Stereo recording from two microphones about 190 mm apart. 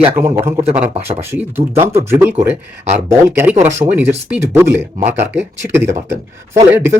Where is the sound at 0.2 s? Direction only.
15° right (ahead or behind).